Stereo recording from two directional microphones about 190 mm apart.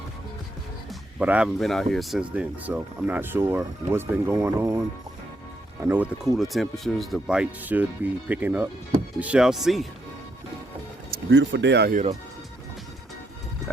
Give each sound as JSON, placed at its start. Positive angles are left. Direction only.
{"t": 0.9, "sound": "speech", "side_deg": -5}
{"t": 5.8, "sound": "speech", "side_deg": -10}
{"t": 11.3, "sound": "speech", "side_deg": -70}
{"t": 11.9, "sound": "speech", "side_deg": -40}